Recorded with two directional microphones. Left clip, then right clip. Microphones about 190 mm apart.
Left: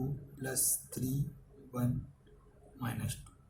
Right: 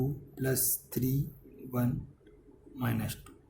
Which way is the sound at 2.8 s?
45° right (ahead or behind).